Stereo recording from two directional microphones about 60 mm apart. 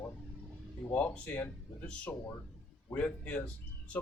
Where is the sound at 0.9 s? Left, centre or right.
Left.